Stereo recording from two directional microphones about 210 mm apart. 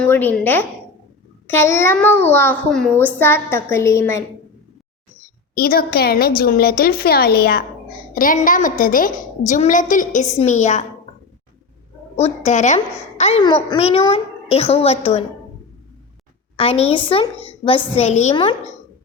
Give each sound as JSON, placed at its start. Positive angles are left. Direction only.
{"t": 0.0, "sound": "a child's voice", "side_deg": 10}
{"t": 5.5, "sound": "a woman's voice", "side_deg": 45}
{"t": 12.5, "sound": "a woman's voice", "side_deg": 35}
{"t": 16.6, "sound": "a woman's voice", "side_deg": 30}